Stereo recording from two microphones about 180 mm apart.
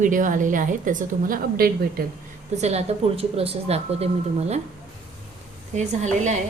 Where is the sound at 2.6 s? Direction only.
35° right (ahead or behind).